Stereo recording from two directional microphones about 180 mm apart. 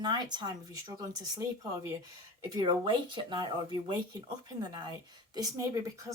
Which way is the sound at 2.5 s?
25° right (ahead or behind).